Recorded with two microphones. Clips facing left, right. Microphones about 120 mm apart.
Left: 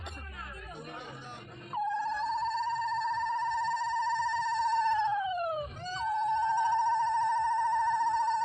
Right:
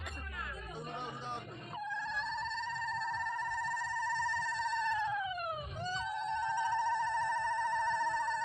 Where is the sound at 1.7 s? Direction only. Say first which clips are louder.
Left 9 dB; 35° left (ahead or behind).